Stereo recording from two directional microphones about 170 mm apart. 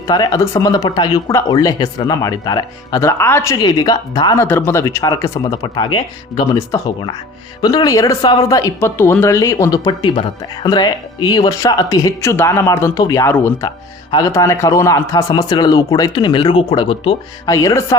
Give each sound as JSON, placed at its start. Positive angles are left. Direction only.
{"t": 0.1, "sound": "speech", "side_deg": 20}
{"t": 17.5, "sound": "speech", "side_deg": 20}